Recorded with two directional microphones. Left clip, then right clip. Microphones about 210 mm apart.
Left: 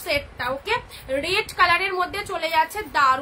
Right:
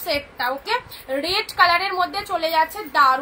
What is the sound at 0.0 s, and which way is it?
A woman's voice, 15° left (ahead or behind).